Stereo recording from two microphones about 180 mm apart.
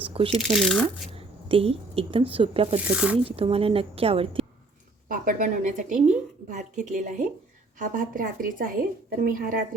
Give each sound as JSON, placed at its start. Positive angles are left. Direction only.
{"t": 0.0, "sound": "shuffling cards", "side_deg": -30}
{"t": 0.5, "sound": "speech", "side_deg": 0}
{"t": 1.1, "sound": "speech", "side_deg": -30}
{"t": 2.7, "sound": "speech", "side_deg": -5}
{"t": 3.2, "sound": "a woman's voice", "side_deg": -30}
{"t": 5.0, "sound": "a woman's voice", "side_deg": -50}